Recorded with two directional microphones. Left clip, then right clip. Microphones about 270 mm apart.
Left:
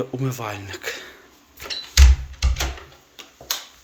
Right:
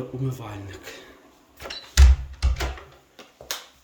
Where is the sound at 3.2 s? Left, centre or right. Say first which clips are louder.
Left 5 dB; centre.